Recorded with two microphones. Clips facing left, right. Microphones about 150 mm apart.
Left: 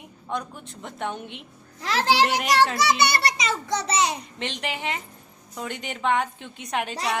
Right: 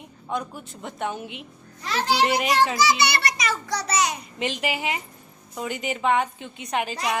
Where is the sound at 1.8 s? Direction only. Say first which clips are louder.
Left 1 dB; 90° left.